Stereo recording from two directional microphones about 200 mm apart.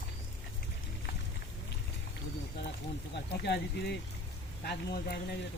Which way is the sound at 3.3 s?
55° left (ahead or behind).